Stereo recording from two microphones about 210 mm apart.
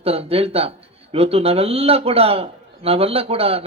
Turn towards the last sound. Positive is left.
turn(degrees=-30)  # may be behind; listen again after turning